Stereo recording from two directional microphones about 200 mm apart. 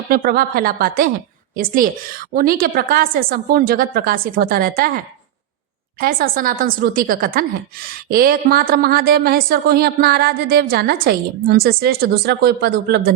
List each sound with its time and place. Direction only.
0.1 s a woman's voice: 45° right (ahead or behind)
6.0 s a woman's voice: 45° right (ahead or behind)